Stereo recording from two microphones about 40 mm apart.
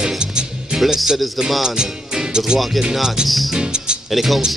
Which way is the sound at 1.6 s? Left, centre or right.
Centre.